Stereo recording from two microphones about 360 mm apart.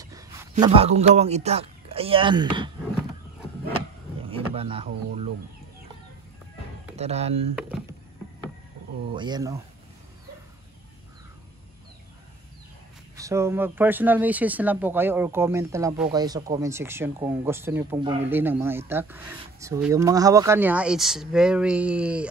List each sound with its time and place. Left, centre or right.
0.0 s speech: centre
4.3 s speech: centre
7.0 s speech: centre
9.1 s speech: centre
13.1 s speech: centre